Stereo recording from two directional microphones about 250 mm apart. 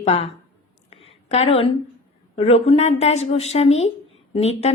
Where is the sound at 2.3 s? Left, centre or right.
Left.